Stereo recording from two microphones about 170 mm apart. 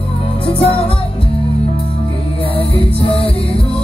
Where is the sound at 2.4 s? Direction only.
35° left (ahead or behind).